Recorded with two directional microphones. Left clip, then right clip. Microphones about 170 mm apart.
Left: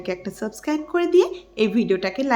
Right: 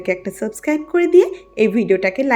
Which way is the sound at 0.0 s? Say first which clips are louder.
Right 7 dB; 20° right (ahead or behind).